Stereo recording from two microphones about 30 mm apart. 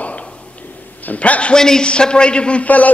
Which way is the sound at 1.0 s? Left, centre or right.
Left.